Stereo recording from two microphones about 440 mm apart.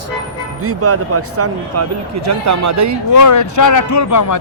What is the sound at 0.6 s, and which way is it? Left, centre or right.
A man's voice, right.